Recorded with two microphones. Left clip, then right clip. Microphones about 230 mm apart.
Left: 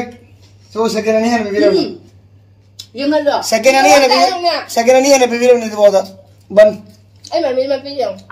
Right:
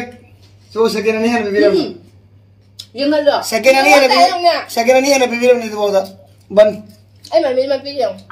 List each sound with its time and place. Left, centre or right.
0.7 s a man's voice: left
2.8 s speech: centre
3.3 s speech: left
4.1 s a woman's voice: centre
4.6 s speech: left
7.2 s a woman's voice: centre